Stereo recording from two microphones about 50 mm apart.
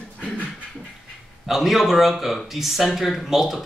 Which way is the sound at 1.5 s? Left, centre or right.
Centre.